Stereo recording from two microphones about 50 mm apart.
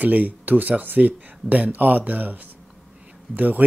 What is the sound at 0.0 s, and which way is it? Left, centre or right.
Speech, right.